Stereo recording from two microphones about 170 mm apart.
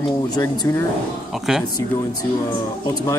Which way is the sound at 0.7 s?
20° left (ahead or behind).